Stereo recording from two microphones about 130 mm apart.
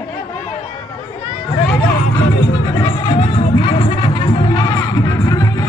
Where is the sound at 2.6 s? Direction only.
30° left (ahead or behind).